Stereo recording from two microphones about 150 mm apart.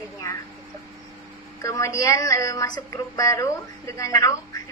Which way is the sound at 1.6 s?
20° left (ahead or behind).